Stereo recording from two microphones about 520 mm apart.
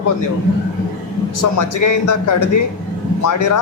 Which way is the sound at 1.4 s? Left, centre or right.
Left.